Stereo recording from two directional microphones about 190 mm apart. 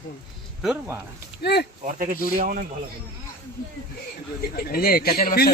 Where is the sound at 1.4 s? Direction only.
60° left (ahead or behind).